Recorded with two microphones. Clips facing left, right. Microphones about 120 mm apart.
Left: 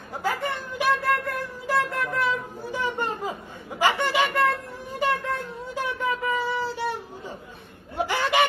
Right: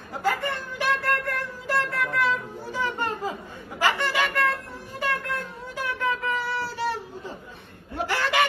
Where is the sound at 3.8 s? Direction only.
15° left (ahead or behind).